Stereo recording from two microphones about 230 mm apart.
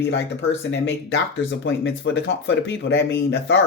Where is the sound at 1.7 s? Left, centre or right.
Left.